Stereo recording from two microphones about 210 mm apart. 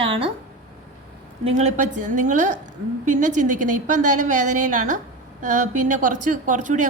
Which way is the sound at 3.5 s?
90° right.